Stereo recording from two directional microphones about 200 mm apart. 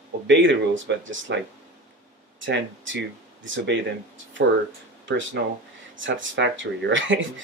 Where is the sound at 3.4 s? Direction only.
70° right (ahead or behind).